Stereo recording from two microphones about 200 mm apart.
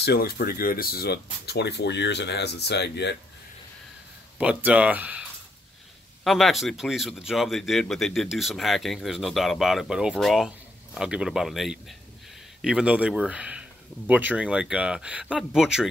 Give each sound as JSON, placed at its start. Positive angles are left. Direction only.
{"t": 0.0, "sound": "speech", "side_deg": 50}
{"t": 4.4, "sound": "speech", "side_deg": -5}
{"t": 6.2, "sound": "speech", "side_deg": 0}